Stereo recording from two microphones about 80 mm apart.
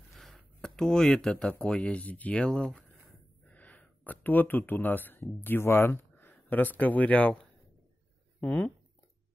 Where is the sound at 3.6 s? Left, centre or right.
Centre.